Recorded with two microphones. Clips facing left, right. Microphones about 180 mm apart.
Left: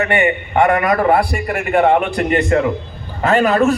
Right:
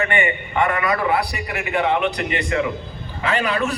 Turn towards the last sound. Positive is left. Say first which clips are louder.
# left 8 dB
turn(degrees=45)  # may be behind; listen again after turning